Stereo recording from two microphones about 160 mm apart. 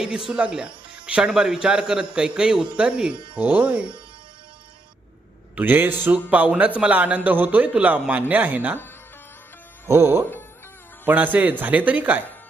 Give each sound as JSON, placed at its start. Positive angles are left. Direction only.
{"t": 0.3, "sound": "a man's voice", "side_deg": -5}
{"t": 5.5, "sound": "speech", "side_deg": -10}
{"t": 9.9, "sound": "speech", "side_deg": -15}